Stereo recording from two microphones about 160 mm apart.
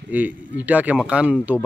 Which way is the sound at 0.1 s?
10° right (ahead or behind).